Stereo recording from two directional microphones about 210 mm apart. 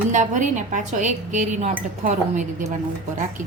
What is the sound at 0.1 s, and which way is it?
Speech, 35° right (ahead or behind).